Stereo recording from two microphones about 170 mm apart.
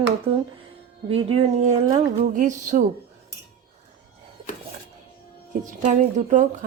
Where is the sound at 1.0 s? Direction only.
35° right (ahead or behind).